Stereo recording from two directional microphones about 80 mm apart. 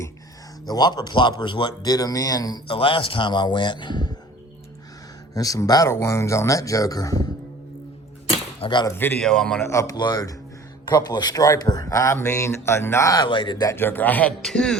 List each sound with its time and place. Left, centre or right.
0.6 s speech: left
1.8 s speech: left
2.6 s a man's voice: left
5.3 s speech: left
5.9 s speech: left
8.6 s speech: left
9.2 s a man's voice: centre
9.6 s speech: left
10.0 s speech: left
13.2 s speech: left
13.7 s a man's voice: left
14.4 s a man's voice: centre